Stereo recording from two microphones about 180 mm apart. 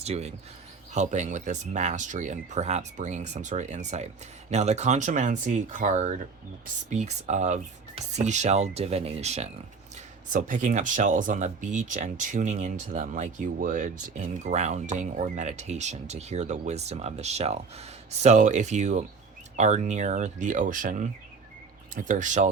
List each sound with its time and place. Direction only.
0.0 s speech: 35° right (ahead or behind)